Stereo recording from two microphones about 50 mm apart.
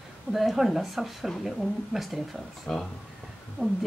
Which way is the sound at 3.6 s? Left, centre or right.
Right.